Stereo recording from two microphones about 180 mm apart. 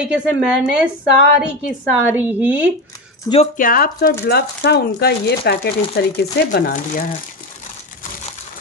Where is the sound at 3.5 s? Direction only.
50° left (ahead or behind).